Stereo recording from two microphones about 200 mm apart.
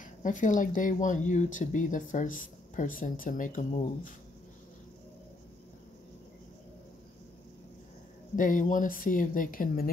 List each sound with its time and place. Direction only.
0.0 s speech: 40° left (ahead or behind)
8.4 s speech: 40° left (ahead or behind)